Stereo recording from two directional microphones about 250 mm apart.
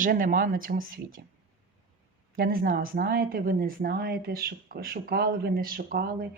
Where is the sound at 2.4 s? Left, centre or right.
Right.